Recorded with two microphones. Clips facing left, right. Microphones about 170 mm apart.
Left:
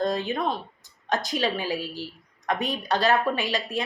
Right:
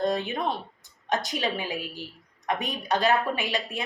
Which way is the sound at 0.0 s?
15° right (ahead or behind).